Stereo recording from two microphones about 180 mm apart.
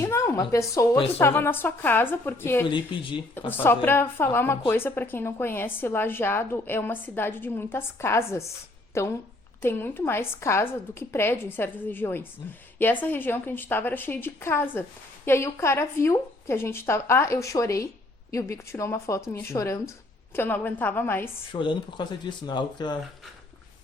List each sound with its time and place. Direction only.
0.0 s a sound: 15° left (ahead or behind)
1.2 s a woman's voice: 10° left (ahead or behind)
2.6 s speech: 30° left (ahead or behind)
3.4 s a woman's voice: 10° left (ahead or behind)
21.5 s speech: 25° left (ahead or behind)